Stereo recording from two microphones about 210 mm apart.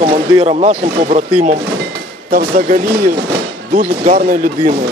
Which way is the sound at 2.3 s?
40° right (ahead or behind).